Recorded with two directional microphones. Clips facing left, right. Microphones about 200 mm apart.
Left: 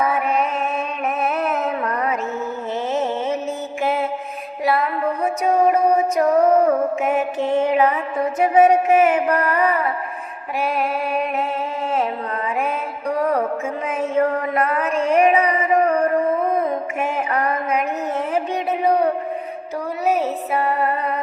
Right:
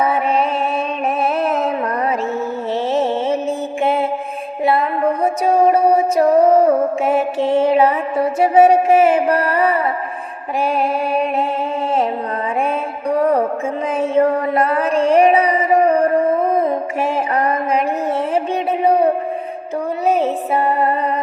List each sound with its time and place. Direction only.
0.0 s mantra: 30° right (ahead or behind)
1.2 s a sound: 30° right (ahead or behind)
2.9 s music: 30° right (ahead or behind)
4.6 s music: 30° right (ahead or behind)
12.6 s music: 30° right (ahead or behind)
18.3 s a sound: 30° right (ahead or behind)
20.1 s music: 30° right (ahead or behind)